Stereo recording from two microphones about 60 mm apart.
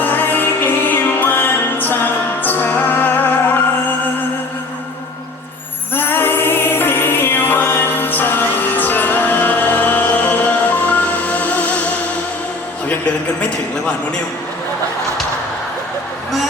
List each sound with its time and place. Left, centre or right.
0.0 s music: left
5.9 s music: left